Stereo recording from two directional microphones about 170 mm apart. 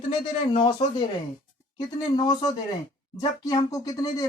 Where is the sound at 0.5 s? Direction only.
30° left (ahead or behind).